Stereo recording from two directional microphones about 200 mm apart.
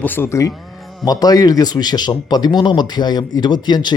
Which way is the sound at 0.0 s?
10° left (ahead or behind).